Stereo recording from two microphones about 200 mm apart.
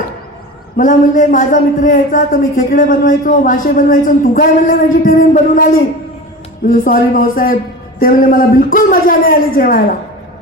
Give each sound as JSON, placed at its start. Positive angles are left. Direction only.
{"t": 0.8, "sound": "a man's voice", "side_deg": 40}